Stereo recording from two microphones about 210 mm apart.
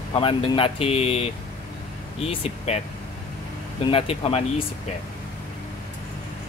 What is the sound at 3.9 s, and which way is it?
Speech, 25° left (ahead or behind).